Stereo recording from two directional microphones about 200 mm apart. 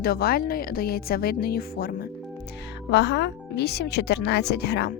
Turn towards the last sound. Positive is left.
turn(degrees=55)  # may be behind; listen again after turning